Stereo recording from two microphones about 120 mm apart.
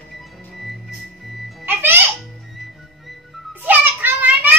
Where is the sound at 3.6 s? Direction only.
15° right (ahead or behind).